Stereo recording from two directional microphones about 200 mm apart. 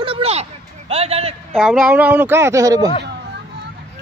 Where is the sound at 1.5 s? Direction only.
5° right (ahead or behind).